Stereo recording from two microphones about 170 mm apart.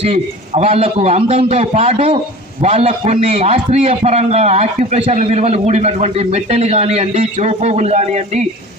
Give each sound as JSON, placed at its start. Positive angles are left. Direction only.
{"t": 0.0, "sound": "a man's voice", "side_deg": -35}